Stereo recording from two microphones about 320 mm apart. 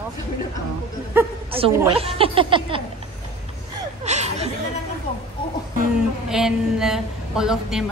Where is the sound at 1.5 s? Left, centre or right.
Centre.